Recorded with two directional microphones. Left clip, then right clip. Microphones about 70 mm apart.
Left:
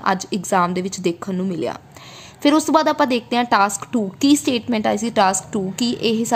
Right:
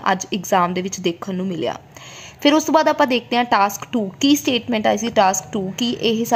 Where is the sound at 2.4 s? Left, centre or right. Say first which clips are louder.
Right 1 dB; centre.